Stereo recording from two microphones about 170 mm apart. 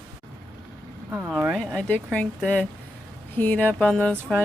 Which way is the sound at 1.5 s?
5° left (ahead or behind).